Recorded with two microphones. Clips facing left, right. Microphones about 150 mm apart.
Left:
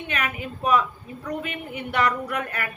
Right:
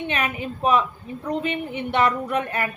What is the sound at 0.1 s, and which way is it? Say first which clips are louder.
A woman's voice: right 3 dB; 25° right (ahead or behind).